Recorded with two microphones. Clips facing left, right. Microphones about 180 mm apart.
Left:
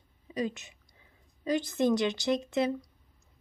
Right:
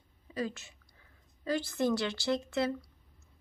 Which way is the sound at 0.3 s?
20° left (ahead or behind).